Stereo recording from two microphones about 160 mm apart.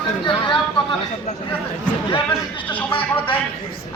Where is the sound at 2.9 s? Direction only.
35° left (ahead or behind).